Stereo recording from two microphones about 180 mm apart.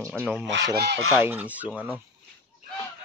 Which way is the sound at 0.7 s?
65° right (ahead or behind).